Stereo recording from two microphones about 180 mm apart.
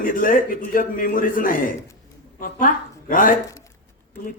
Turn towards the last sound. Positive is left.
turn(degrees=50)  # may be behind; listen again after turning